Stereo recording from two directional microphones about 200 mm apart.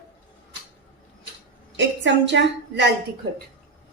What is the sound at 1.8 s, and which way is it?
A woman's voice, 65° right (ahead or behind).